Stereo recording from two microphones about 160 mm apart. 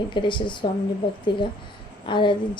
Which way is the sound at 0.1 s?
30° left (ahead or behind).